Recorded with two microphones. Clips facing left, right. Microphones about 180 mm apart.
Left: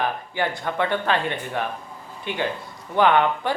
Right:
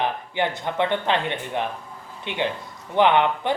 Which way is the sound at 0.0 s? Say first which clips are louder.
Right 1 dB; 20° right (ahead or behind).